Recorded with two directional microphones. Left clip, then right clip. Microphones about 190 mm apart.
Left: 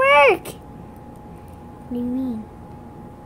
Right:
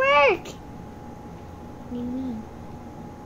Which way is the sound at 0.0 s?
25° left (ahead or behind).